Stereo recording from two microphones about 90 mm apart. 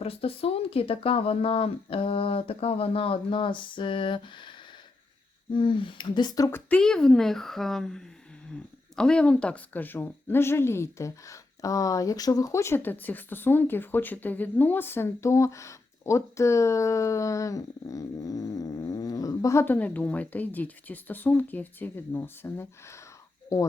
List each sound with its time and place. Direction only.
0.0 s speech: 90° left; by 4.5 s 65° left (ahead or behind)
5.5 s speech: 65° left (ahead or behind); by 6.5 s 45° left (ahead or behind)
6.5 s a woman's voice: 15° left (ahead or behind); by 19.6 s 35° left (ahead or behind)
19.6 s a woman's voice: 20° left (ahead or behind)